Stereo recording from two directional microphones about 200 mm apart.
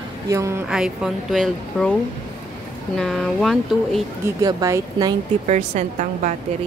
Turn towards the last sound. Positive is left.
turn(degrees=-35)  # may be behind; listen again after turning